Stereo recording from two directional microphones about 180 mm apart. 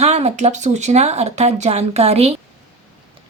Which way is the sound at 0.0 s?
35° right (ahead or behind).